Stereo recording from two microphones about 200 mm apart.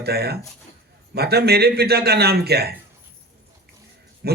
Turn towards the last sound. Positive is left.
turn(degrees=-55)  # may be behind; listen again after turning